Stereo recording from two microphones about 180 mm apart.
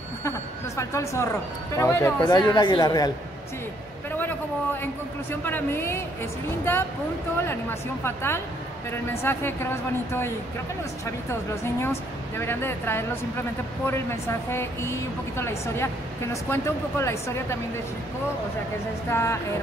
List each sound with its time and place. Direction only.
0.7 s speech: 15° left (ahead or behind)
4.1 s a man's voice: 10° left (ahead or behind)
8.0 s speech: 15° left (ahead or behind)
11.6 s speech: 15° left (ahead or behind)
19.0 s speech: 15° left (ahead or behind)